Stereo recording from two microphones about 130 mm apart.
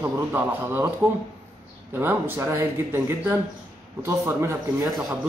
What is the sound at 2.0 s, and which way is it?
A man's voice, 15° right (ahead or behind).